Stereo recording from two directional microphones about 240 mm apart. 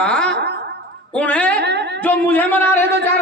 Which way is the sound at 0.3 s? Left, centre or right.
Right.